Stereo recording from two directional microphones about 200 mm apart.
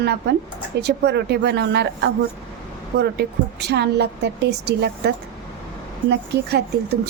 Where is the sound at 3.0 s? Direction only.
55° right (ahead or behind).